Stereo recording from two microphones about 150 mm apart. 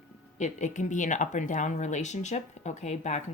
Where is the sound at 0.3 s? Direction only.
55° left (ahead or behind).